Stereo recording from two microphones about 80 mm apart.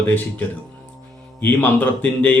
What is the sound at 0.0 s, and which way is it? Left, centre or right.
A man's voice, left.